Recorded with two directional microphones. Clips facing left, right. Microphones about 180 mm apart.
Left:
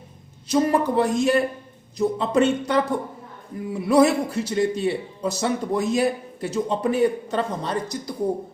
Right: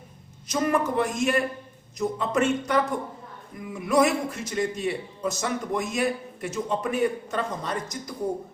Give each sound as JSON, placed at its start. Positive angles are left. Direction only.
{"t": 0.4, "sound": "a man's voice", "side_deg": 30}